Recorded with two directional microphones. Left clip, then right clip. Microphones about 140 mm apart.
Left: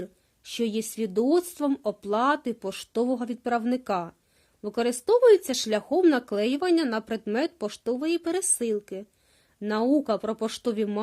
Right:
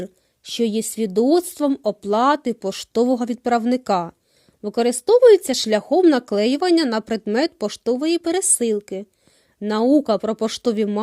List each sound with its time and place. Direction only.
0.0 s speech: 30° right (ahead or behind)